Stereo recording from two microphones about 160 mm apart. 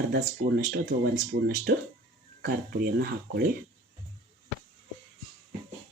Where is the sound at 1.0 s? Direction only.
65° right (ahead or behind).